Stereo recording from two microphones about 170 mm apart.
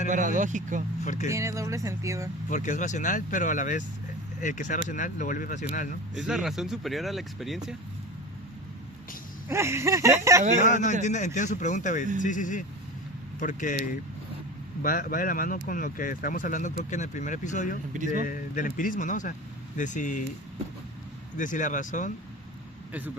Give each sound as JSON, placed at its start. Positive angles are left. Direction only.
{"t": 0.1, "sound": "speech", "side_deg": -50}
{"t": 1.0, "sound": "speech", "side_deg": 45}
{"t": 1.3, "sound": "speech", "side_deg": -20}
{"t": 2.5, "sound": "speech", "side_deg": 45}
{"t": 6.1, "sound": "speech", "side_deg": 0}
{"t": 9.5, "sound": "speech", "side_deg": -15}
{"t": 10.6, "sound": "speech", "side_deg": 45}
{"t": 14.8, "sound": "speech", "side_deg": 55}
{"t": 21.3, "sound": "speech", "side_deg": 50}
{"t": 22.9, "sound": "speech", "side_deg": -10}